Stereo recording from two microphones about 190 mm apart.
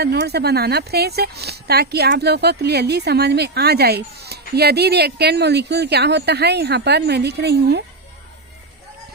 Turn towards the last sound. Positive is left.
turn(degrees=-60)  # may be behind; listen again after turning